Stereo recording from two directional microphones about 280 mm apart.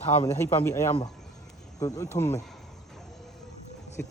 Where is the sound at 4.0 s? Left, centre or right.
Centre.